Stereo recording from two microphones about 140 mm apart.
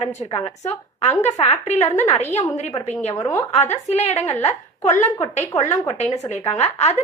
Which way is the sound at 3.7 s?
50° left (ahead or behind).